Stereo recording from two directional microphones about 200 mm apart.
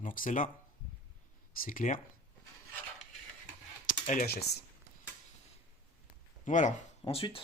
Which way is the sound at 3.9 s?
40° left (ahead or behind).